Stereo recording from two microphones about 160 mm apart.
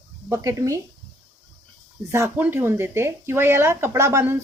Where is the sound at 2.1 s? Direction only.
15° right (ahead or behind).